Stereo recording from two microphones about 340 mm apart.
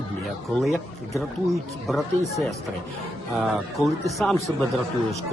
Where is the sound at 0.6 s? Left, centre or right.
Centre.